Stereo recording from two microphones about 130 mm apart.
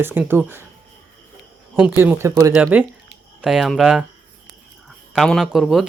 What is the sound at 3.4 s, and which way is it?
Speech, 5° right (ahead or behind).